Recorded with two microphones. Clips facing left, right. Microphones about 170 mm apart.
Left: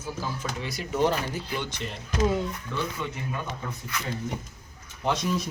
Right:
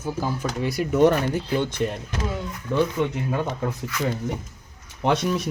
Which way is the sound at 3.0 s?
60° right (ahead or behind).